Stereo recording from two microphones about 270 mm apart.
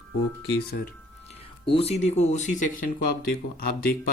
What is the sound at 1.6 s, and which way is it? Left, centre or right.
Speech, left.